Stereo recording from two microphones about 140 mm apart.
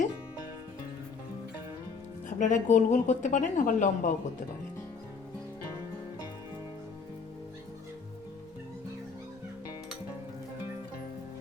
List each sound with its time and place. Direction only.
2.4 s speech: 65° left (ahead or behind)